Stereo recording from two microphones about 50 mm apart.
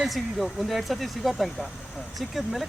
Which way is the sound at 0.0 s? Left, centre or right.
Centre.